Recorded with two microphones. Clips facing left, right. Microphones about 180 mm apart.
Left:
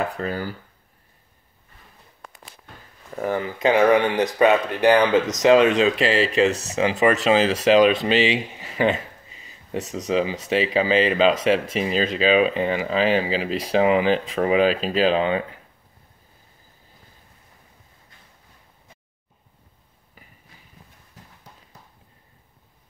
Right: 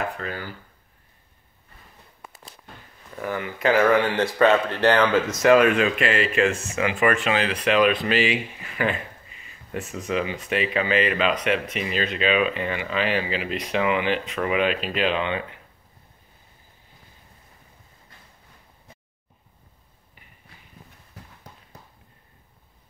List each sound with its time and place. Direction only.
0.1 s speech: 40° left (ahead or behind)
3.2 s speech: 35° left (ahead or behind)
3.5 s speech: 20° left (ahead or behind)
5.9 s speech: 35° left (ahead or behind)